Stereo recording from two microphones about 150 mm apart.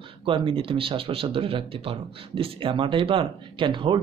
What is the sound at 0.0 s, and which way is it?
Speech, 35° right (ahead or behind).